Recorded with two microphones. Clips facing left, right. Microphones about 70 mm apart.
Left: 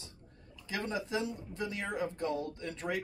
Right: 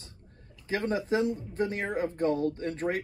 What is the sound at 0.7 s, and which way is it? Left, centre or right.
Speech, right.